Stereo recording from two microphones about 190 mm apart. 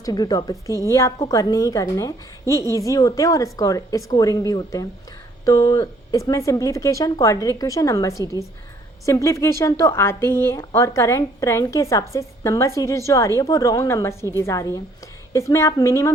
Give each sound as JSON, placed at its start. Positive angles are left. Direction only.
{"t": 0.0, "sound": "a woman's voice", "side_deg": 20}